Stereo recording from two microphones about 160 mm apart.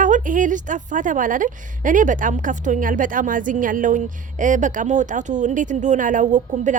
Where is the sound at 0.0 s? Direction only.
55° right (ahead or behind).